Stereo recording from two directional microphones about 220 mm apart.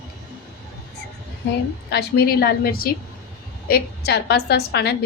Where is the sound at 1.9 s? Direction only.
45° left (ahead or behind).